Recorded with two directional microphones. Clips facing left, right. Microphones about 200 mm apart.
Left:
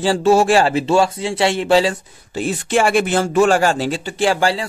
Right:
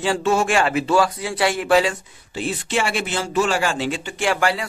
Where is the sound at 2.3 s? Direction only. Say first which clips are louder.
Left 5 dB; 45° left (ahead or behind); by 4.6 s 30° left (ahead or behind).